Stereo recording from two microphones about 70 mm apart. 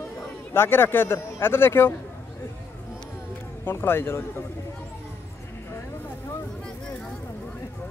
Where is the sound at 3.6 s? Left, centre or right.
Left.